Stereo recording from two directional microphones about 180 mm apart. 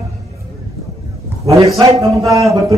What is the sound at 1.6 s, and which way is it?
A man's voice, 20° right (ahead or behind).